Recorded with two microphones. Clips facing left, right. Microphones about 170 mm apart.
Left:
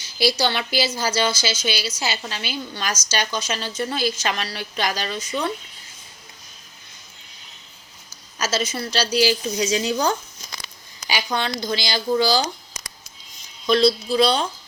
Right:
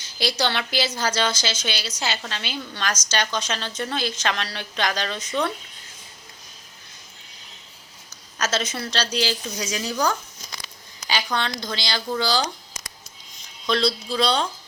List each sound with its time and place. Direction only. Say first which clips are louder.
0.0 s a woman's voice: left 4 dB; 5° left (ahead or behind)
8.4 s a woman's voice: left 1 dB; 5° left (ahead or behind)
9.6 s speech: left 4 dB; 25° left (ahead or behind)
11.1 s speech: left 1 dB; 10° left (ahead or behind)
13.7 s speech: left 5 dB; 10° left (ahead or behind)